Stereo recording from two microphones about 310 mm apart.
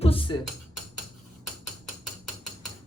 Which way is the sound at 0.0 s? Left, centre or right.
Centre.